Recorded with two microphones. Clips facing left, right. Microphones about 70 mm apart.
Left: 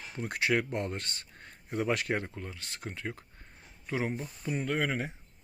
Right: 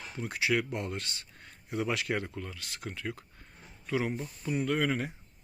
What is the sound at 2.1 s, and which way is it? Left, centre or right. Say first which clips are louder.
Speech: even; left.